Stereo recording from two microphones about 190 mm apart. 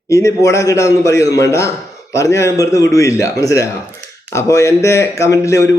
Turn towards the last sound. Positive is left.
turn(degrees=15)  # may be behind; listen again after turning